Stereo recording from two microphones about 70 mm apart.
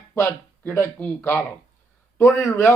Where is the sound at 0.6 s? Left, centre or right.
Left.